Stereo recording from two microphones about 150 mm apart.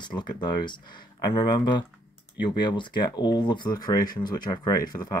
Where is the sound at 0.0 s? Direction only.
30° left (ahead or behind).